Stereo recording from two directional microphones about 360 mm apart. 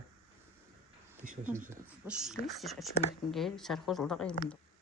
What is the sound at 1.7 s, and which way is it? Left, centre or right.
A woman's voice, centre.